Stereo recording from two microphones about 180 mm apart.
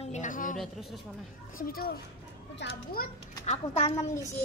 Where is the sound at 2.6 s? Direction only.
75° left (ahead or behind).